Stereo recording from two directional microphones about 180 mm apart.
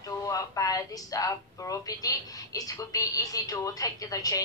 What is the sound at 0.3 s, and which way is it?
Speech, 20° left (ahead or behind).